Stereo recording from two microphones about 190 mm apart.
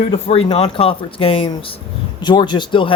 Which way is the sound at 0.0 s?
30° left (ahead or behind).